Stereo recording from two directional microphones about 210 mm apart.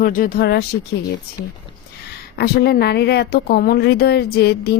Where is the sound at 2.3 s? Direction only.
50° left (ahead or behind).